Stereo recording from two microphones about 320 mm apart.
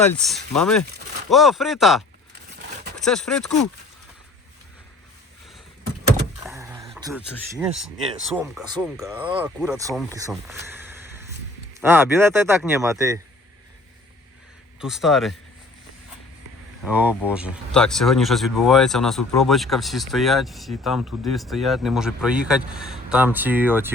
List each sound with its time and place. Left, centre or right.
0.1 s speech: centre
6.4 s a sound: centre
8.4 s speech: centre
10.4 s a sound: centre
11.8 s speech: centre
14.8 s speech: centre
16.8 s speech: centre